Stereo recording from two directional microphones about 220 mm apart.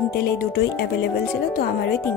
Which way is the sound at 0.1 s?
45° left (ahead or behind).